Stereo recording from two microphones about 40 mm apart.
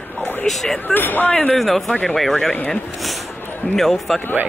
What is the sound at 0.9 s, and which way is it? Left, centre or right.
Speech, left.